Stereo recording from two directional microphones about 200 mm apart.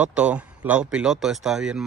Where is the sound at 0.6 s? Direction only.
5° right (ahead or behind).